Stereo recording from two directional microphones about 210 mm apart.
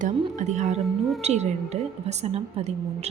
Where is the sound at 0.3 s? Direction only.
35° right (ahead or behind).